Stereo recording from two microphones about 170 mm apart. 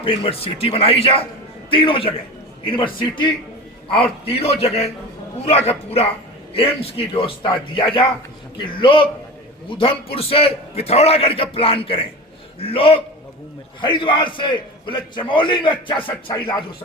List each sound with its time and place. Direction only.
0.0 s a man's voice: 30° left (ahead or behind)